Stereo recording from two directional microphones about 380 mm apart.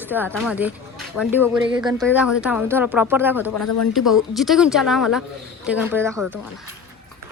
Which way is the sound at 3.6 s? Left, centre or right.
Left.